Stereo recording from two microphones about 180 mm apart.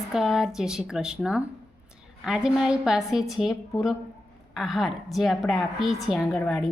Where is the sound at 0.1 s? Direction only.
5° right (ahead or behind).